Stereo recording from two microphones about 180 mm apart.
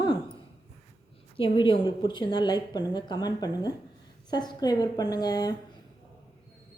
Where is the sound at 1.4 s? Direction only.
30° left (ahead or behind).